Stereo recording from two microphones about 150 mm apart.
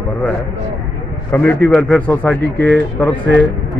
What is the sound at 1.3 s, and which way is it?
Speech, 15° left (ahead or behind).